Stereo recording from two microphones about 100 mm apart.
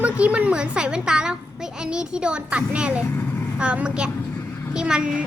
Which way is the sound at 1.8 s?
10° right (ahead or behind).